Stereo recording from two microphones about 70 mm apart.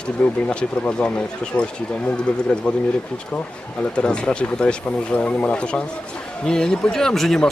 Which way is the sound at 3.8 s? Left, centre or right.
Centre.